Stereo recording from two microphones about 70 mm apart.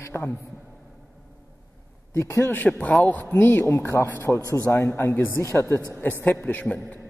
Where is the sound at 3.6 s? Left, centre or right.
Left.